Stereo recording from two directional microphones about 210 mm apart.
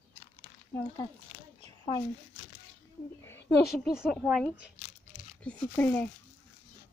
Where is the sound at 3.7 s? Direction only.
Centre (ahead or behind).